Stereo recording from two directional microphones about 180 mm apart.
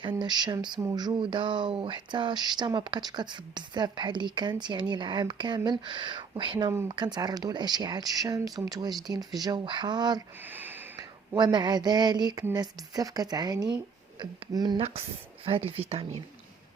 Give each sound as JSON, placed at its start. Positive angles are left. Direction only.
{"t": 0.2, "sound": "speech", "side_deg": -25}
{"t": 10.5, "sound": "snort", "side_deg": -10}
{"t": 11.3, "sound": "speech", "side_deg": -25}